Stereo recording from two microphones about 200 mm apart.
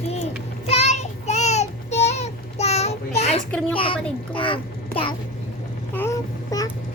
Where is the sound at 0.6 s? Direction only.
35° left (ahead or behind).